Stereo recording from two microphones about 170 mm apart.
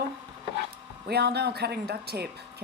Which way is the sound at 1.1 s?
70° right (ahead or behind).